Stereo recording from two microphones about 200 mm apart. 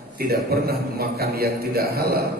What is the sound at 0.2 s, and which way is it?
A man's voice, 50° right (ahead or behind).